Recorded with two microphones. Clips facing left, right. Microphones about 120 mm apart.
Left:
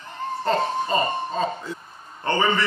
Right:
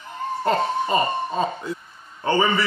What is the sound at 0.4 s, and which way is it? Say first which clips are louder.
Laughter: right 1 dB; 15° right (ahead or behind).